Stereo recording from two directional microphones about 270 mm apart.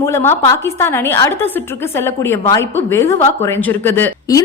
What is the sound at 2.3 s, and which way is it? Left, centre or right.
A woman's voice, centre.